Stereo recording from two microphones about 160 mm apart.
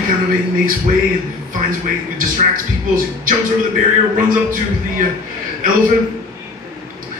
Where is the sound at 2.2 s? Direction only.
60° right (ahead or behind).